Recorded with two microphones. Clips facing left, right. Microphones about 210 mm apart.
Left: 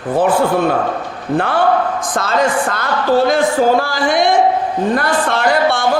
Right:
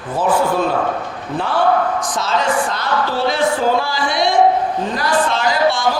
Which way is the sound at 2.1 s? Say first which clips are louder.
Left 4 dB; 55° left (ahead or behind).